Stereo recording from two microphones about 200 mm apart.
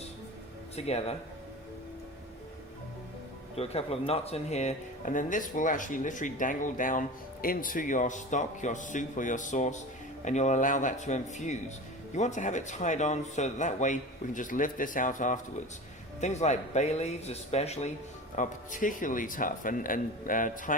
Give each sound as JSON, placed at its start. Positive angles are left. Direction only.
{"t": 0.8, "sound": "speech", "side_deg": 30}
{"t": 3.6, "sound": "speech", "side_deg": 30}